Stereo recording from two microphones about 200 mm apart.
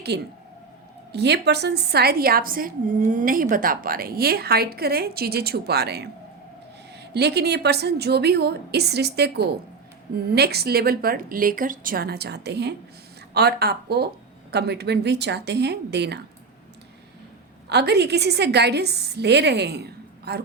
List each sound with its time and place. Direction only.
0.1 s a woman's voice: 55° right (ahead or behind)
17.7 s a woman's voice: 55° right (ahead or behind)